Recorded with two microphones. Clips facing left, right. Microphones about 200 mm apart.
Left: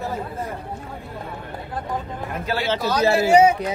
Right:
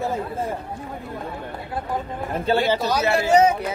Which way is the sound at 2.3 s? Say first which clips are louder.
Right 6 dB; 30° right (ahead or behind).